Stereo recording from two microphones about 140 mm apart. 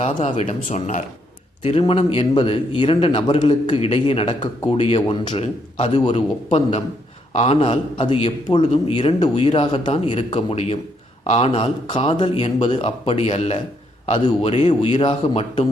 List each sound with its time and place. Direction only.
0.1 s speech: 40° left (ahead or behind); by 1.0 s 60° left (ahead or behind)
1.6 s a man's voice: 45° left (ahead or behind)
3.8 s a man's voice: 50° left (ahead or behind)